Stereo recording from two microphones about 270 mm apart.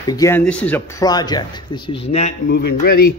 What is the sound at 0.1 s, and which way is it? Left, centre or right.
Speech, centre.